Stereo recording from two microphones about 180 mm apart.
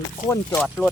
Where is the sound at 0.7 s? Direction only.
5° left (ahead or behind).